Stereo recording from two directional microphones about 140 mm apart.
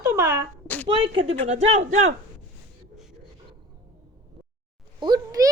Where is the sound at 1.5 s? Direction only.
50° right (ahead or behind).